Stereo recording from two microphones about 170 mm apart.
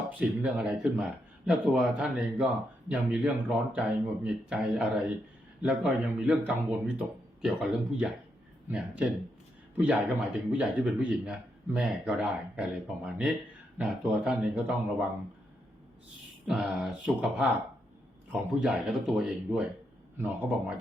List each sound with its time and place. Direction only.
0.2 s speech: 5° right (ahead or behind)
16.5 s speech: centre (ahead or behind)